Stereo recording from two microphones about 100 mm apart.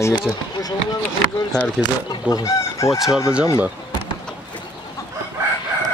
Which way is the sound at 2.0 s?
40° left (ahead or behind).